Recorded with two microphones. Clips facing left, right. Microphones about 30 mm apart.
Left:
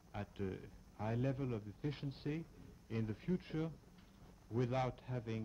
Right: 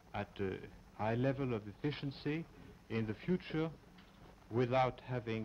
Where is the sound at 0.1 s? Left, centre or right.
Right.